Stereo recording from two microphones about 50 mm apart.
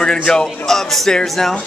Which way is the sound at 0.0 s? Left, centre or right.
Centre.